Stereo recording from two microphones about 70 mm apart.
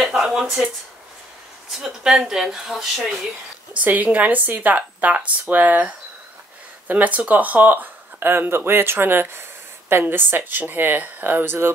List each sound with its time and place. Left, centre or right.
0.0 s a sound: centre
1.7 s speech: centre
3.8 s speech: right